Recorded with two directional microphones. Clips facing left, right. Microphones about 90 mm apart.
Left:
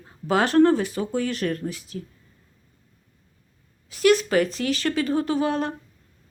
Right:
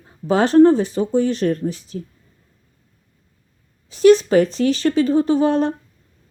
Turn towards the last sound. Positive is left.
turn(degrees=-30)  # may be behind; listen again after turning